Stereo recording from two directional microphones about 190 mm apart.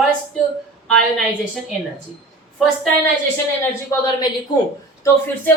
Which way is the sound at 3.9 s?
15° left (ahead or behind).